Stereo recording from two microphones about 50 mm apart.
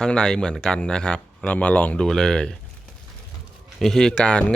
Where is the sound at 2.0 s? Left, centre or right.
Centre.